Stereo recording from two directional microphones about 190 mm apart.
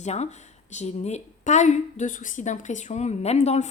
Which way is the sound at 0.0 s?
35° left (ahead or behind).